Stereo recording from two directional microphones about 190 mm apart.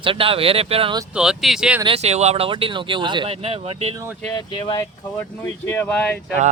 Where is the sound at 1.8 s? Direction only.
30° right (ahead or behind).